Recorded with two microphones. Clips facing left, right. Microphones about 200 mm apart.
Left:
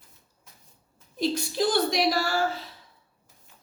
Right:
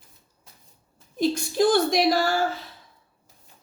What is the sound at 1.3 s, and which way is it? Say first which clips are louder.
Speech: right 5 dB; 50° right (ahead or behind).